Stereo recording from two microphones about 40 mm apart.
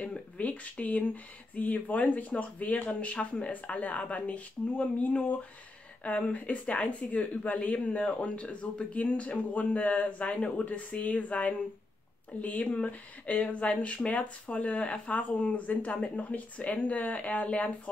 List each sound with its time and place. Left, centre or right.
0.0 s speech: left
6.3 s speech: left